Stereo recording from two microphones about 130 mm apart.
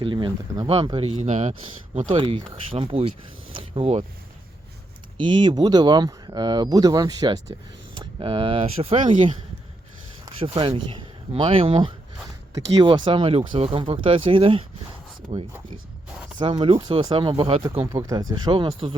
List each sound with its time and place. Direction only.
0.0 s speech: 40° right (ahead or behind); by 2.0 s 55° right (ahead or behind)
2.0 s speech: 40° right (ahead or behind)
5.1 s speech: 35° right (ahead or behind)
7.9 s speech: 40° right (ahead or behind)
10.2 s speech: 40° right (ahead or behind)
17.8 s speech: 25° right (ahead or behind)